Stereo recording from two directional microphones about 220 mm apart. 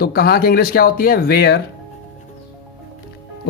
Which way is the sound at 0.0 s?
45° left (ahead or behind).